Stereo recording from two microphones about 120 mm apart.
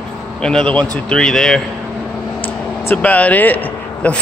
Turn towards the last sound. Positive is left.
turn(degrees=10)  # may be behind; listen again after turning